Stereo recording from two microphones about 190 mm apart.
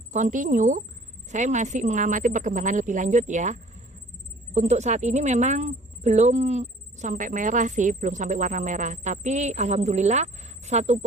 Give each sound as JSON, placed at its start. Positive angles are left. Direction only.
{"t": 0.1, "sound": "speech", "side_deg": -40}